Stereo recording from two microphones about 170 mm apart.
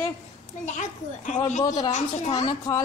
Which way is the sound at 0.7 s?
45° left (ahead or behind).